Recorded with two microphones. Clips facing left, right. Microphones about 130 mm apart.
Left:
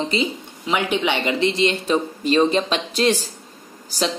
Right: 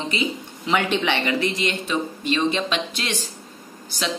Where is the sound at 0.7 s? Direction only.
10° left (ahead or behind); by 3.3 s 35° left (ahead or behind).